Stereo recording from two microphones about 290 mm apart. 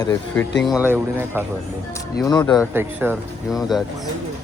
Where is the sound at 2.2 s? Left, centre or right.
Centre.